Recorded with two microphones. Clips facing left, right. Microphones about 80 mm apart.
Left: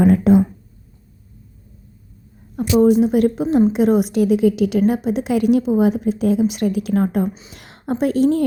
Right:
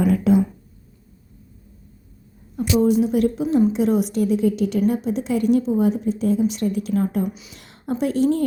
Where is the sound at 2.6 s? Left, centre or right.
Left.